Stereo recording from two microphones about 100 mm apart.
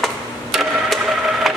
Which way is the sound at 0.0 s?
Centre (ahead or behind).